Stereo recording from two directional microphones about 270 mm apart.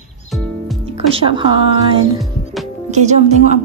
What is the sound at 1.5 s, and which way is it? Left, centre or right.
Music, centre.